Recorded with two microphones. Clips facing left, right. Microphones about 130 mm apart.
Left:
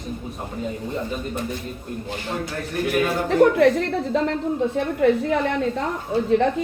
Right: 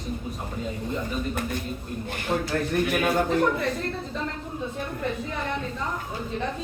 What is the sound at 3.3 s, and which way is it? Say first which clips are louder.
A woman's voice: left 8 dB; 75° left (ahead or behind).